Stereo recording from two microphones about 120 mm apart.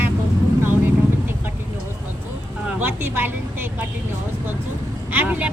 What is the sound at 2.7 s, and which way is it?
Speech, 15° right (ahead or behind).